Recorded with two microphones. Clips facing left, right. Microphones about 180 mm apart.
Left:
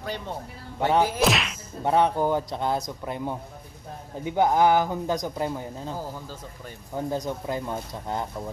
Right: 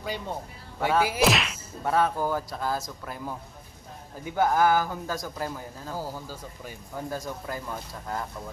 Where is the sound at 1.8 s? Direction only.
20° left (ahead or behind).